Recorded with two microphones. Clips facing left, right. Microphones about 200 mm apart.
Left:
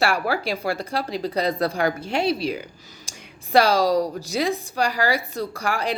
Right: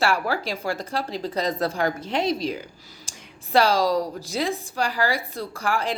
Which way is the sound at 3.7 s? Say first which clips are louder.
Left 2 dB; 45° left (ahead or behind).